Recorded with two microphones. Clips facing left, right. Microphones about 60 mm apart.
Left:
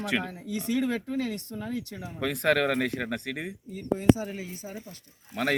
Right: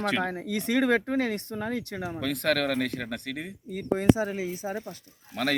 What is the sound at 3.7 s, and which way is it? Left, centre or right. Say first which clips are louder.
Speech: right 3 dB; right.